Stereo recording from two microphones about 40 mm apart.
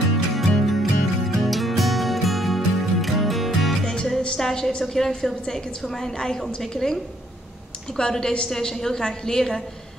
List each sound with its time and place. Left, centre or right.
0.4 s music: centre
3.8 s music: left
4.4 s a sound: centre
4.7 s a woman's voice: centre